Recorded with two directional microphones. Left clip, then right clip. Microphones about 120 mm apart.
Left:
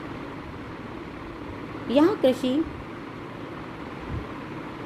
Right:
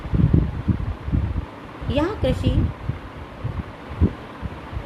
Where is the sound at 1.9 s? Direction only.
75° left (ahead or behind).